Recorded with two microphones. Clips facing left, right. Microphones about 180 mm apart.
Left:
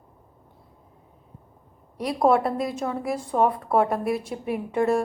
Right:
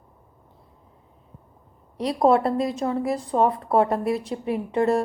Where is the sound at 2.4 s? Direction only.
30° right (ahead or behind).